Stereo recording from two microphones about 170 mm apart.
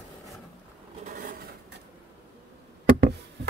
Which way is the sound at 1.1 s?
55° right (ahead or behind).